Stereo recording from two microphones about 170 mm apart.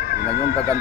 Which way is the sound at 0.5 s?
20° right (ahead or behind).